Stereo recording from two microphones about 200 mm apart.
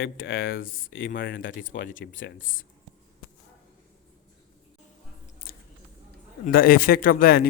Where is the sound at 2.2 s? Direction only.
75° left (ahead or behind).